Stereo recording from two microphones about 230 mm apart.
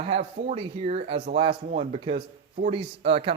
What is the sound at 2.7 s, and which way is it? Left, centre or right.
Speech, right.